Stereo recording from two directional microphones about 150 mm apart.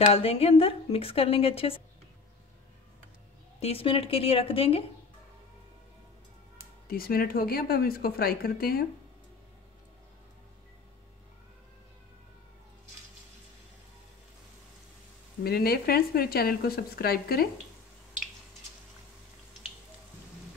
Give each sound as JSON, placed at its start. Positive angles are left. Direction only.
{"t": 0.1, "sound": "a woman's voice", "side_deg": 40}
{"t": 3.5, "sound": "a woman's voice", "side_deg": 40}
{"t": 6.9, "sound": "speech", "side_deg": 85}
{"t": 15.4, "sound": "speech", "side_deg": 90}